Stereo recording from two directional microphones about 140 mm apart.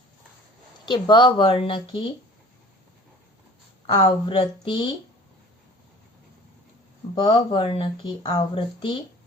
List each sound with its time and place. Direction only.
0.9 s speech: 35° left (ahead or behind)
4.0 s speech: 40° left (ahead or behind)
7.2 s speech: 40° left (ahead or behind)